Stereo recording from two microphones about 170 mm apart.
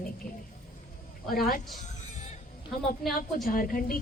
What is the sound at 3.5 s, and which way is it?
Speech, 55° left (ahead or behind).